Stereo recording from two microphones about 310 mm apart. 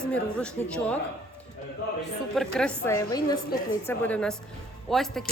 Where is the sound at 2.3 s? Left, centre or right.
Centre.